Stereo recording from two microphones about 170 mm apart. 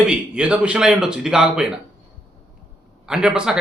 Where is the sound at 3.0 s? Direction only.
5° right (ahead or behind).